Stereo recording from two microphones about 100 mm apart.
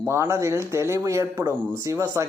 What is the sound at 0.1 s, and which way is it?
Speech, 25° right (ahead or behind).